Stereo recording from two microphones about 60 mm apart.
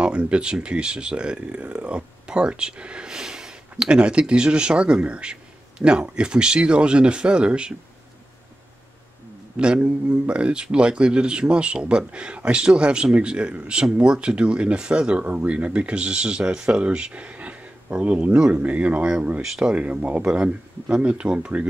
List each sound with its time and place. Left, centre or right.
0.0 s speech: centre
9.6 s speech: centre
19.4 s speech: centre